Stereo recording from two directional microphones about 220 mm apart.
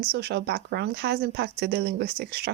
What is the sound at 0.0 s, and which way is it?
Speech, 45° right (ahead or behind).